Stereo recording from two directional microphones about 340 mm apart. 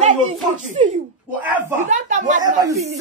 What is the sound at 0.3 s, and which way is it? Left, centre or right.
Speech, right.